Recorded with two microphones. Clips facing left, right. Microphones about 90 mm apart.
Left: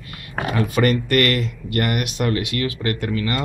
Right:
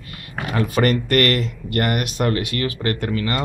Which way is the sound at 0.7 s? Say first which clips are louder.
Right 1 dB; 45° right (ahead or behind).